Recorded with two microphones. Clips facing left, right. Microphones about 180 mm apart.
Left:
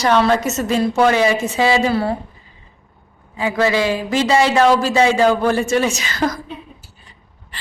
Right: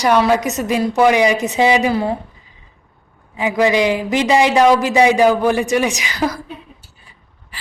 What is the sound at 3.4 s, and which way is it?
A man's voice, 15° right (ahead or behind).